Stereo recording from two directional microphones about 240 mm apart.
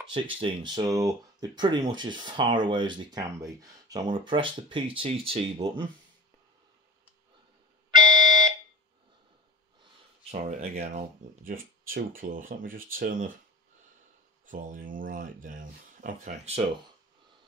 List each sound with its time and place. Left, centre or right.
0.1 s speech: centre
7.9 s alarm: centre
10.3 s speech: right
14.4 s speech: right